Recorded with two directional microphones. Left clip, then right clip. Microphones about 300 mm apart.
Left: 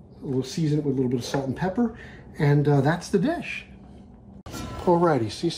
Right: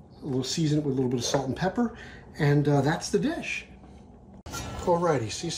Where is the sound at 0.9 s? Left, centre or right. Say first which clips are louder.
Left 1 dB; centre.